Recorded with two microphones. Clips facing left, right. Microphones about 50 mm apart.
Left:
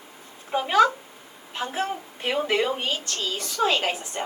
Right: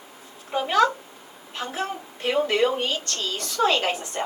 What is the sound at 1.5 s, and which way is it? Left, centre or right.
A woman's voice, centre.